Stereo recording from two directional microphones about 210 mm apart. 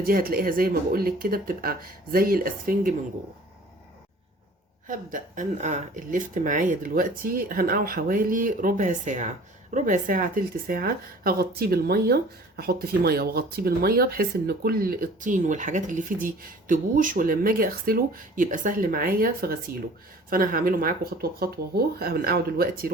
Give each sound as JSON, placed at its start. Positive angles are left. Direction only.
{"t": 0.0, "sound": "speech", "side_deg": -45}
{"t": 5.1, "sound": "speech", "side_deg": -40}